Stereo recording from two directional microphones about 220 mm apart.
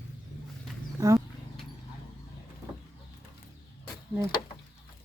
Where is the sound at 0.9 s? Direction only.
15° right (ahead or behind).